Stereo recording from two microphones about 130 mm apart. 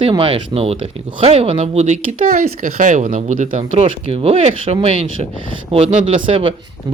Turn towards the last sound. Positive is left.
turn(degrees=-45)  # may be behind; listen again after turning